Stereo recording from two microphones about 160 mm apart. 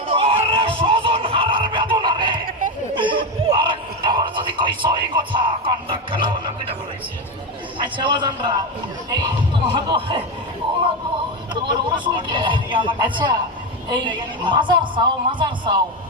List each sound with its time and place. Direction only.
0.1 s music: 35° right (ahead or behind)
2.9 s a sound: 30° right (ahead or behind)
7.8 s a man's voice: 30° right (ahead or behind)
9.0 s music: 30° right (ahead or behind)
12.0 s music: 30° right (ahead or behind)
13.9 s a man's voice: 30° right (ahead or behind)